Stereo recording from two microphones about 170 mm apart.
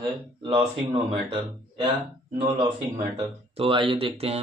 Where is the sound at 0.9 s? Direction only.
30° right (ahead or behind).